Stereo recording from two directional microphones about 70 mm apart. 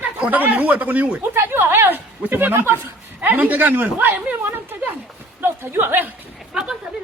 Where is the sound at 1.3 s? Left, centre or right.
Right.